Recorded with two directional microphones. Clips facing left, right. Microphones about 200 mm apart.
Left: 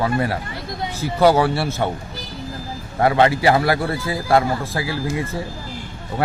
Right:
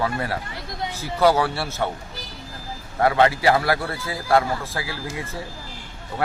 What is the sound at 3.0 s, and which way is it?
A man's voice, 20° left (ahead or behind).